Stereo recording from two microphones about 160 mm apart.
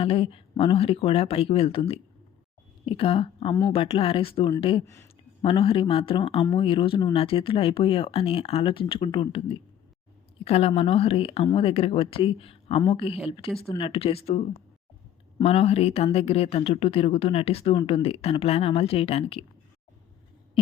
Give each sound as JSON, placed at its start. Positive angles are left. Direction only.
{"t": 0.0, "sound": "speech", "side_deg": 35}
{"t": 4.9, "sound": "speech", "side_deg": 15}
{"t": 5.4, "sound": "speech", "side_deg": 35}
{"t": 10.4, "sound": "speech", "side_deg": 40}